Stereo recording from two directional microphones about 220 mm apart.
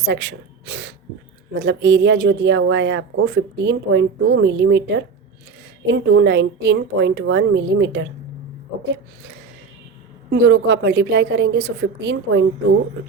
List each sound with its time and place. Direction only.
0.0 s a sound: 55° right (ahead or behind)
1.5 s a woman's voice: 50° right (ahead or behind)
10.4 s a woman's voice: 55° right (ahead or behind)